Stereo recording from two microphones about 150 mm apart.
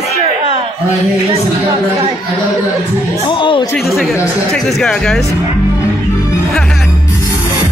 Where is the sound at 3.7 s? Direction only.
Centre (ahead or behind).